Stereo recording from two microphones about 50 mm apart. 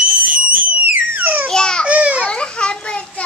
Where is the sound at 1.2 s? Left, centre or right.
Right.